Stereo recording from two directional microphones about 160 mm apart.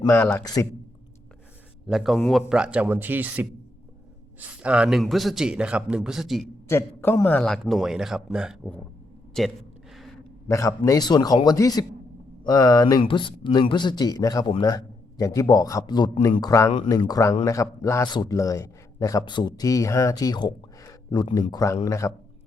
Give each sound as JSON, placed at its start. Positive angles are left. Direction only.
{"t": 0.0, "sound": "a man's voice", "side_deg": 15}
{"t": 0.4, "sound": "a man's voice", "side_deg": 25}
{"t": 1.9, "sound": "a man's voice", "side_deg": 0}
{"t": 6.7, "sound": "a man's voice", "side_deg": 15}
{"t": 9.3, "sound": "a sound", "side_deg": 0}
{"t": 10.5, "sound": "a man's voice", "side_deg": 20}